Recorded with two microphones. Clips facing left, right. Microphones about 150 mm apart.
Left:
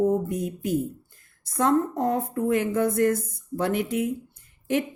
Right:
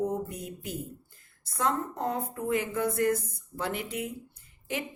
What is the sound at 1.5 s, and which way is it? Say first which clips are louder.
Speech: left 8 dB; 50° left (ahead or behind).